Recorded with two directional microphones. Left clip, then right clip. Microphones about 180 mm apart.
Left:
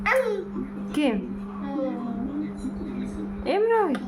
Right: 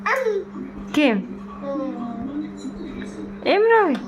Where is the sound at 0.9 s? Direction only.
15° right (ahead or behind).